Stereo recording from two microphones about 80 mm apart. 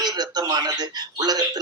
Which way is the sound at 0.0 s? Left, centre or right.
Right.